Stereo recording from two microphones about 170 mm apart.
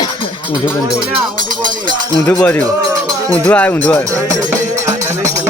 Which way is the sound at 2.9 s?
20° right (ahead or behind).